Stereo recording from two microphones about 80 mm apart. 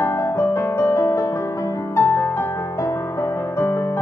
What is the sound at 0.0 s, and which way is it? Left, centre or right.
Music, left.